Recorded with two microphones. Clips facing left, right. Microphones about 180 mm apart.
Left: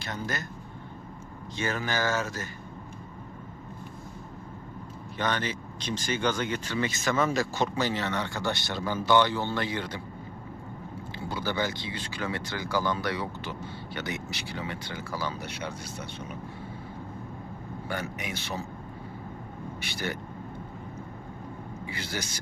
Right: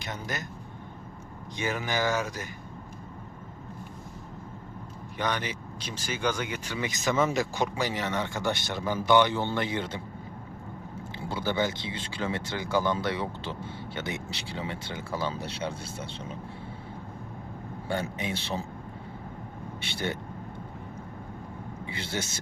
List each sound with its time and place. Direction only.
0.0 s speech: 15° right (ahead or behind)
1.5 s speech: 15° right (ahead or behind)
5.1 s speech: 10° right (ahead or behind)
11.3 s speech: 20° right (ahead or behind)
17.8 s speech: 30° right (ahead or behind)
19.8 s speech: 25° right (ahead or behind)
21.8 s speech: 25° right (ahead or behind)